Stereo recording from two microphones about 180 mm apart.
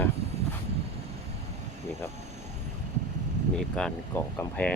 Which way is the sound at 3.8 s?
10° left (ahead or behind).